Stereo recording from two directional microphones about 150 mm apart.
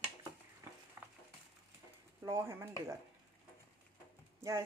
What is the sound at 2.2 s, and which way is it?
Speech, 20° right (ahead or behind).